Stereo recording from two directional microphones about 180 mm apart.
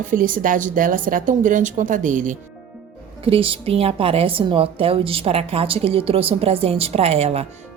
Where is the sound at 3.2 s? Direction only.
30° right (ahead or behind).